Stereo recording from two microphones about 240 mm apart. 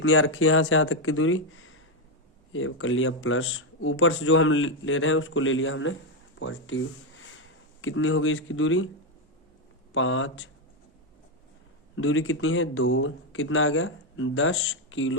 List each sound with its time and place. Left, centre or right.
0.0 s a man's voice: left
9.9 s speech: left
11.9 s a man's voice: left